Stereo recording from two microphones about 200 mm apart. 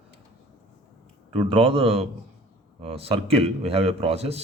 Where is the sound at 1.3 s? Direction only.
25° right (ahead or behind).